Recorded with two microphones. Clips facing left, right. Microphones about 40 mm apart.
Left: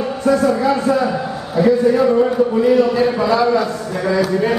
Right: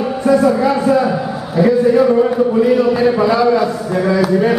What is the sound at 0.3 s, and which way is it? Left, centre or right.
A man's voice, centre.